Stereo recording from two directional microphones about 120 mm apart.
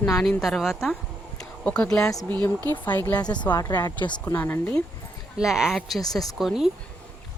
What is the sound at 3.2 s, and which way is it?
Speech, 35° left (ahead or behind).